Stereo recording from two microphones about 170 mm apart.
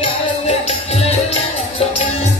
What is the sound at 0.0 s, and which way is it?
Music, 35° left (ahead or behind).